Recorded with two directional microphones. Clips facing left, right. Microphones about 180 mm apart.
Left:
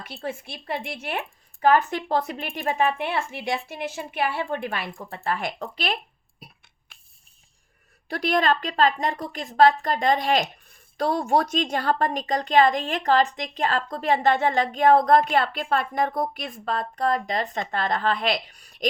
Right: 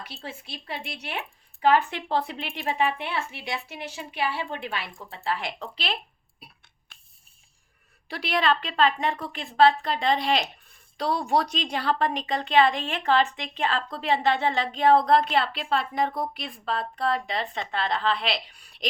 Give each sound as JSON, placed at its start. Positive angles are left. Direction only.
{"t": 0.0, "sound": "a woman's voice", "side_deg": 50}
{"t": 8.0, "sound": "a woman's voice", "side_deg": 45}